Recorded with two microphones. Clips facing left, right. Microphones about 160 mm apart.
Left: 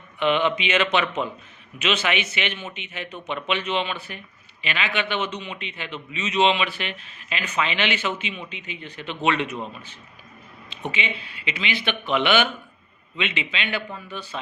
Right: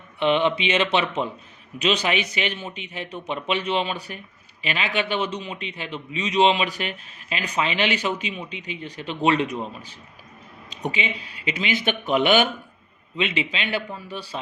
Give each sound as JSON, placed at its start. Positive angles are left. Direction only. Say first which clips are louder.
{"t": 0.2, "sound": "a man's voice", "louder": "right 1 dB", "side_deg": -30}
{"t": 10.7, "sound": "a man's voice", "louder": "right 2 dB", "side_deg": -40}